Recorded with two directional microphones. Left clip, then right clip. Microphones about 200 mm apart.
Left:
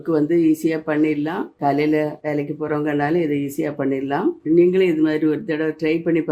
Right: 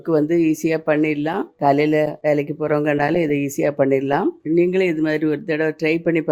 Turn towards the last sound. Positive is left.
turn(degrees=-30)  # may be behind; listen again after turning